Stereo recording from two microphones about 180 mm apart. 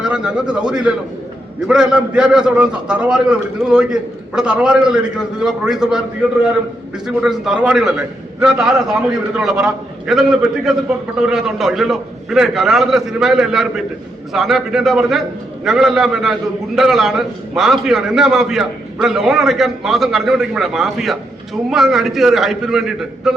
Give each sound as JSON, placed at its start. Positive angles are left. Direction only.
{"t": 0.0, "sound": "a man's voice", "side_deg": -5}
{"t": 7.2, "sound": "a man's voice", "side_deg": -5}